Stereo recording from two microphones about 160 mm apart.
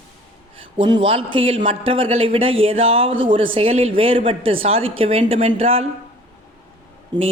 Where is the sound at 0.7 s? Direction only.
30° right (ahead or behind).